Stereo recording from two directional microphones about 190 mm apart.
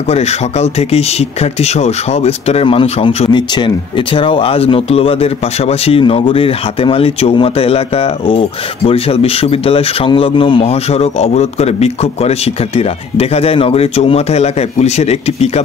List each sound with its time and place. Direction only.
0.1 s speech: 35° left (ahead or behind)